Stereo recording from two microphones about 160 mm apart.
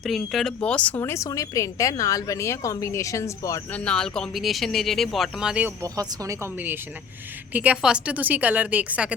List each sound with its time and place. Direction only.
0.0 s speech: centre (ahead or behind); by 3.6 s 20° left (ahead or behind)
3.7 s speech: 5° left (ahead or behind)
5.8 s a woman's voice: 20° right (ahead or behind)